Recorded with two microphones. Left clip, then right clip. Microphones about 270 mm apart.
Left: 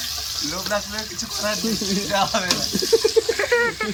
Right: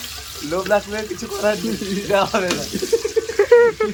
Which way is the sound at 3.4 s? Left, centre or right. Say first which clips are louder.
Right 7 dB; centre.